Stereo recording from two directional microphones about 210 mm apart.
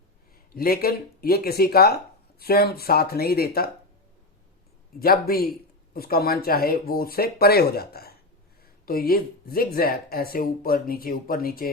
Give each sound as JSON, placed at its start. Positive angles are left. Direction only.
{"t": 0.5, "sound": "speech", "side_deg": 45}
{"t": 4.9, "sound": "speech", "side_deg": 45}